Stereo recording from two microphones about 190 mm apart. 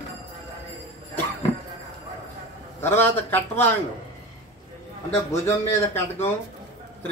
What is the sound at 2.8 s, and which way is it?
Speech, 10° left (ahead or behind).